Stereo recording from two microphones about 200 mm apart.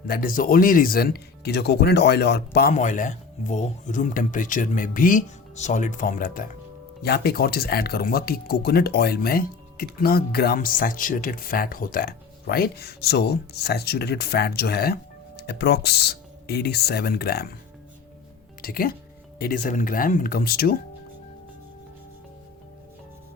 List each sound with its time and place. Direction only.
0.1 s speech: 45° left (ahead or behind)
2.7 s speech: 40° left (ahead or behind)
18.6 s speech: 45° left (ahead or behind)